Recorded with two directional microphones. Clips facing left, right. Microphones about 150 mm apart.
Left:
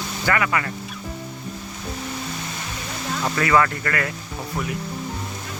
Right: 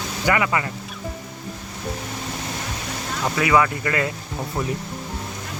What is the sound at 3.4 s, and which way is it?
Speech, 10° right (ahead or behind).